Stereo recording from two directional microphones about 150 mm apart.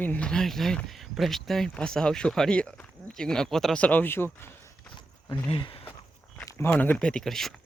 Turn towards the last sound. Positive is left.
turn(degrees=0)  # may be behind; listen again after turning